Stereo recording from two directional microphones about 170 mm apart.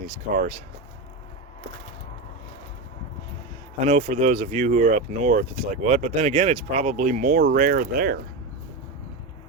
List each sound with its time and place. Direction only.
3.8 s speech: 45° right (ahead or behind); by 8.2 s 60° right (ahead or behind)